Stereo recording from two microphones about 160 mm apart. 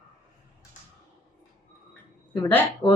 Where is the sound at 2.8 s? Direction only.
40° left (ahead or behind).